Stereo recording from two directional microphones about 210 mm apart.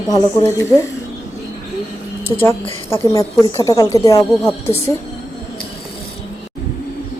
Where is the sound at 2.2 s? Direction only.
10° left (ahead or behind).